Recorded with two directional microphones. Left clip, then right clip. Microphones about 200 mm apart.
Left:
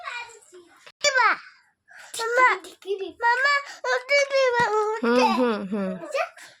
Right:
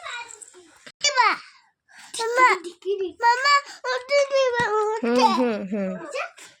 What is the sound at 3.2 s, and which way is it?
Child singing, 10° right (ahead or behind).